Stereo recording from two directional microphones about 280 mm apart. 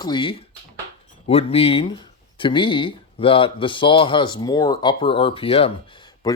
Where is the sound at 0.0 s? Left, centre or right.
Centre.